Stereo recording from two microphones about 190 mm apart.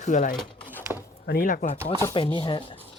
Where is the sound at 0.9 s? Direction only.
Centre (ahead or behind).